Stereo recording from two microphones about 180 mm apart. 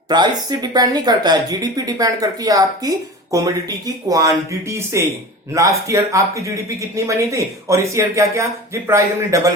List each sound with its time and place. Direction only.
0.1 s a woman's voice: 25° right (ahead or behind)